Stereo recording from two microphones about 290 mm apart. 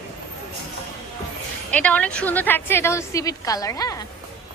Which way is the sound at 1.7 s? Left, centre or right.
Centre.